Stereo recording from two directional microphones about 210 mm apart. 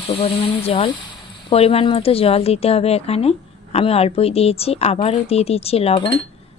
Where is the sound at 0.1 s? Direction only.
25° left (ahead or behind).